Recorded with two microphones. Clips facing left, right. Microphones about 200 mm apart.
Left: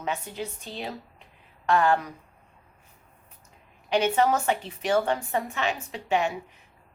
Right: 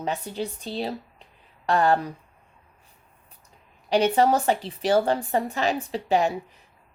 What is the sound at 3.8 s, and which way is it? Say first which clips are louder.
Speech: right 3 dB; 35° right (ahead or behind).